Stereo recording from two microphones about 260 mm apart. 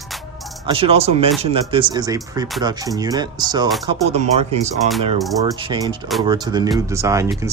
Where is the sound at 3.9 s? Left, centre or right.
Right.